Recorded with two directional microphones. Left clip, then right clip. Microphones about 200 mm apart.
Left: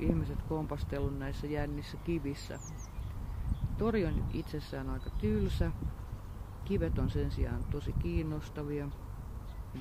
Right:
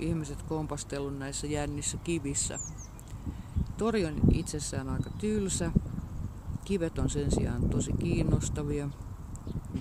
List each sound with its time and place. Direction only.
0.0 s speech: 10° right (ahead or behind)
3.7 s speech: 15° right (ahead or behind)
6.7 s speech: 20° right (ahead or behind)